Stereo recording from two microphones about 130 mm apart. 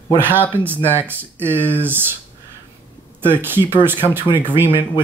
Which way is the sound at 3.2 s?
15° right (ahead or behind).